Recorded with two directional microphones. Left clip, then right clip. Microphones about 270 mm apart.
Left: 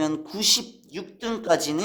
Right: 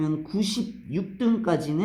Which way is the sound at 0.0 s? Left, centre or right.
Left.